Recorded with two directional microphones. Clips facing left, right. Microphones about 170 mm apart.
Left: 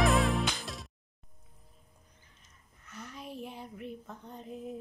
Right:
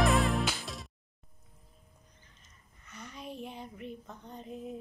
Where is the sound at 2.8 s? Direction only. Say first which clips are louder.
Even; 5° left (ahead or behind).